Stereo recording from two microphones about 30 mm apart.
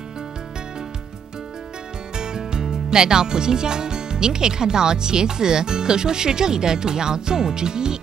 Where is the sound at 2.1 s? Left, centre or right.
Right.